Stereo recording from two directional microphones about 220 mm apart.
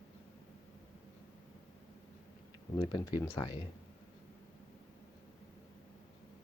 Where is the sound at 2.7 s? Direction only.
20° left (ahead or behind).